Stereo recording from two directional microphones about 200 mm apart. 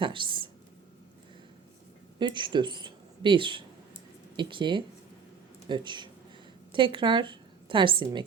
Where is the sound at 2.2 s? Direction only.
25° right (ahead or behind).